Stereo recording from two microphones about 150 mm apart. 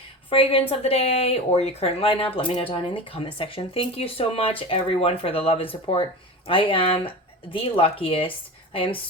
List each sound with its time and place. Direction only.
0.3 s speech: 40° left (ahead or behind)